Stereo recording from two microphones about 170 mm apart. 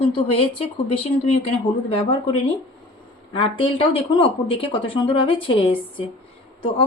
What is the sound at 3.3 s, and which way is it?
Speech, 30° left (ahead or behind).